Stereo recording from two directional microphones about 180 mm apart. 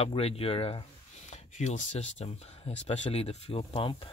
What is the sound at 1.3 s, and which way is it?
Speech, 40° left (ahead or behind).